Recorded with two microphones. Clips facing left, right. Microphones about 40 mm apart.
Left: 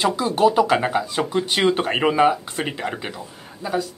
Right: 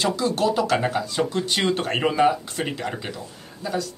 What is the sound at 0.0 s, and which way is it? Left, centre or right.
Speech, centre.